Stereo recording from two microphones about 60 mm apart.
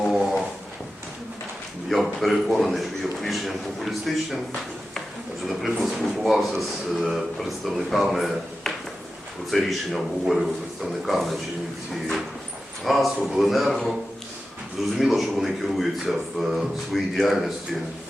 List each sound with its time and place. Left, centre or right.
0.0 s a sound: centre
1.9 s speech: centre
5.5 s speech: centre
12.8 s speech: centre
14.9 s speech: centre